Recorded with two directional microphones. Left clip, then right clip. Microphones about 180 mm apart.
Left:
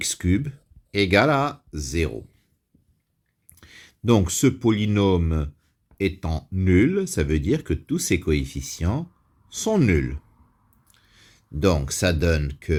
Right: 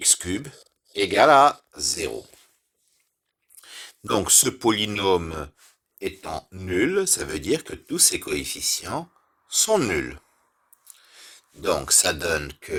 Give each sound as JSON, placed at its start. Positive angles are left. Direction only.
{"t": 0.1, "sound": "speech", "side_deg": -35}
{"t": 3.7, "sound": "speech", "side_deg": -30}